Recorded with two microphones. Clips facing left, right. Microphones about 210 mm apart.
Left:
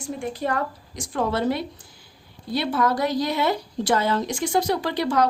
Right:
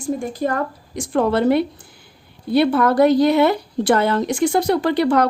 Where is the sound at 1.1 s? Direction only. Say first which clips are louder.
Right 7 dB; 60° right (ahead or behind).